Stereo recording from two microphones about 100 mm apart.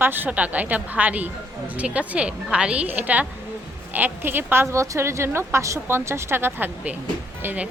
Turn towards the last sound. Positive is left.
turn(degrees=-20)  # may be behind; listen again after turning